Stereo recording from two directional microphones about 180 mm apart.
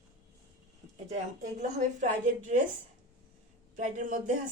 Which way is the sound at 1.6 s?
45° right (ahead or behind).